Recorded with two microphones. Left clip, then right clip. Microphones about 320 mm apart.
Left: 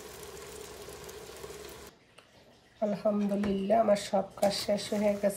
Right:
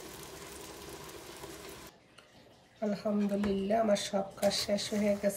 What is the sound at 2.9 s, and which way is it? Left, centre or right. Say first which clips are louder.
Speech: left 3 dB; centre.